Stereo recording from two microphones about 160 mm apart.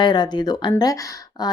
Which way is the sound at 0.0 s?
30° left (ahead or behind).